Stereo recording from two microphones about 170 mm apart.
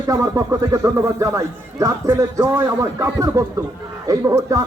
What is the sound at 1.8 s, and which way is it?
Music, 20° right (ahead or behind).